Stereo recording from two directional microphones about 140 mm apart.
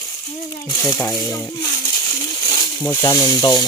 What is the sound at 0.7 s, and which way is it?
Speech, 25° left (ahead or behind).